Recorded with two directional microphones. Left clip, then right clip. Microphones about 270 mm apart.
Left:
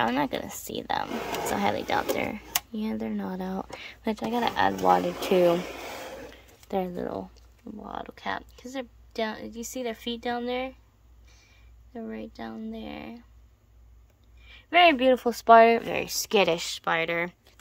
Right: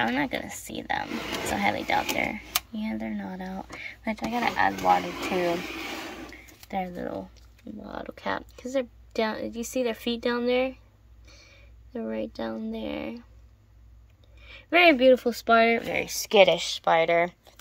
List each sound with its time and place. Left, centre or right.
0.0 s speech: centre
6.7 s speech: left
7.8 s speech: centre
14.4 s speech: centre